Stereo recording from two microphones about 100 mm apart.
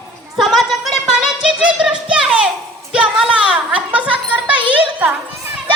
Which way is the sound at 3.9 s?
15° right (ahead or behind).